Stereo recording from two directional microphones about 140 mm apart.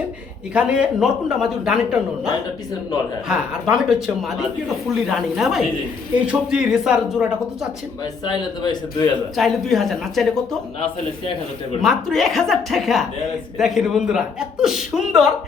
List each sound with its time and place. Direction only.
0.5 s a man's voice: 5° right (ahead or behind)
8.2 s speech: 30° left (ahead or behind)
9.3 s a man's voice: centre (ahead or behind)
11.8 s a man's voice: centre (ahead or behind)